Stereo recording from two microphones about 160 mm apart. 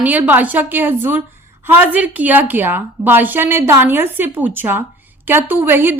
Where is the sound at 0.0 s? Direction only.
10° right (ahead or behind).